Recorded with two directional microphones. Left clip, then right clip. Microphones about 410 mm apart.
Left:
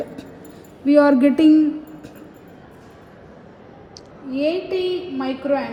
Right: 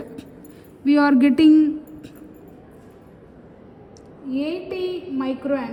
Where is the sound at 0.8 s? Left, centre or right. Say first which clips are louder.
Left 3 dB; centre.